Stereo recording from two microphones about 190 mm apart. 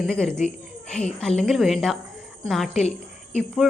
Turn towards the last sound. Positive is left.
turn(degrees=0)  # may be behind; listen again after turning